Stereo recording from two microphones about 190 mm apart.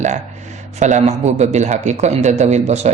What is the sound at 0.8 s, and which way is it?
Speech, 35° right (ahead or behind).